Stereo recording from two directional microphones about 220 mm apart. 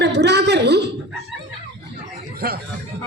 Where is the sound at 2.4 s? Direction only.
45° right (ahead or behind).